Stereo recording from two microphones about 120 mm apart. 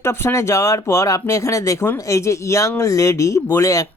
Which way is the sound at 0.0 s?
20° left (ahead or behind).